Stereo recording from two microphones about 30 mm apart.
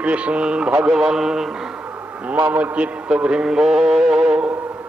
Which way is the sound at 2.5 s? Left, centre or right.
Right.